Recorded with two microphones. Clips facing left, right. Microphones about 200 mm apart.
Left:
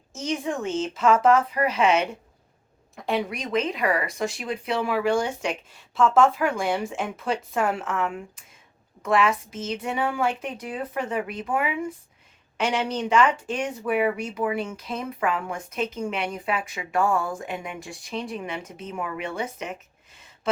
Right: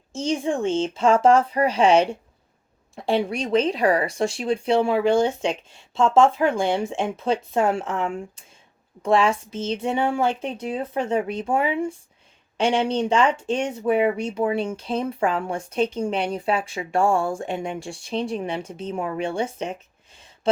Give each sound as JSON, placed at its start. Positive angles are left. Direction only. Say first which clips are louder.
{"t": 0.1, "sound": "speech", "louder": "right 4 dB", "side_deg": -30}